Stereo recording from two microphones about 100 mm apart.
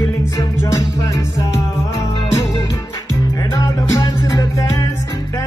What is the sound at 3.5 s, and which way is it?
Music, 35° left (ahead or behind).